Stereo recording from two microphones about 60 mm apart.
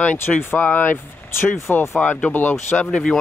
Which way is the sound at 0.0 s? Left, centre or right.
Left.